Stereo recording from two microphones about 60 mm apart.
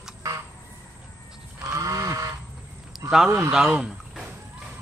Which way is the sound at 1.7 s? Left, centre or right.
Right.